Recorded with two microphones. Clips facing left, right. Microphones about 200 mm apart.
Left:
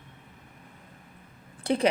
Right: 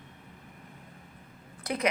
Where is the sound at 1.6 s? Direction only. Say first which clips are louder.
Left 7 dB; 30° left (ahead or behind).